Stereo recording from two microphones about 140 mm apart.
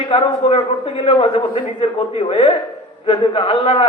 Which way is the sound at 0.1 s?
40° left (ahead or behind).